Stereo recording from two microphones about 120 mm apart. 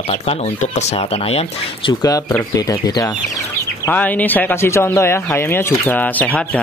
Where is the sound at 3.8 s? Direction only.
15° left (ahead or behind).